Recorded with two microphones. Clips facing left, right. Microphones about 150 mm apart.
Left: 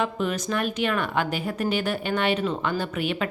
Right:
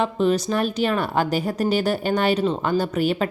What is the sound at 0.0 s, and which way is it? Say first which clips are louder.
Speech: right 6 dB; 30° right (ahead or behind).